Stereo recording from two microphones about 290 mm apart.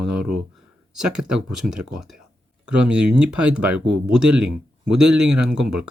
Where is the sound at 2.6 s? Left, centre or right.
Right.